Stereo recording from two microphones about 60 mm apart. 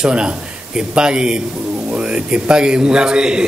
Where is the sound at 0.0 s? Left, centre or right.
Centre.